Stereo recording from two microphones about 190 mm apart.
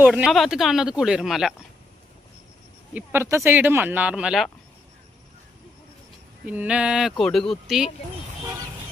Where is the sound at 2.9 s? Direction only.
10° right (ahead or behind).